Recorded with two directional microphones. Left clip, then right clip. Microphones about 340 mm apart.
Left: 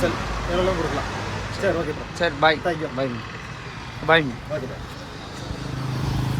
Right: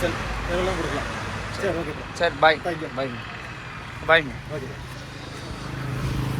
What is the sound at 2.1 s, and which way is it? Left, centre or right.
Speech, centre.